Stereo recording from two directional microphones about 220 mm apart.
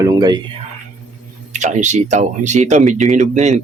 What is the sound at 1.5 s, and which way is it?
Speech, 30° right (ahead or behind).